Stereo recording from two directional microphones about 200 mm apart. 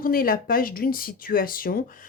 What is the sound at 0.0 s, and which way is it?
Speech, 45° left (ahead or behind).